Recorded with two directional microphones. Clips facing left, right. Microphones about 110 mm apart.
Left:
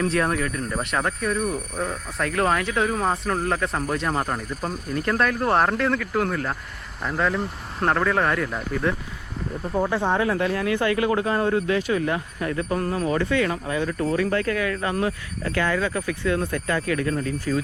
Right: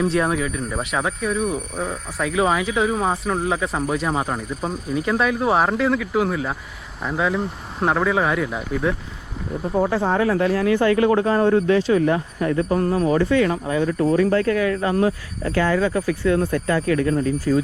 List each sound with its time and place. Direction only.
0.0 s speech: 5° right (ahead or behind)
10.0 s speech: 35° right (ahead or behind)